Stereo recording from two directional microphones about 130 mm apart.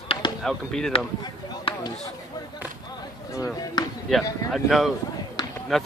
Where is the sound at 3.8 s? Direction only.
35° left (ahead or behind).